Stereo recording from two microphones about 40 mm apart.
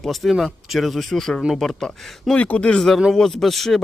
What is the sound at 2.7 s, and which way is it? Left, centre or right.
Speech, centre.